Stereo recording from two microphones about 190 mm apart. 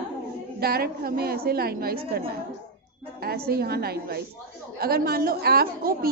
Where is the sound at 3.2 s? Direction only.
55° right (ahead or behind).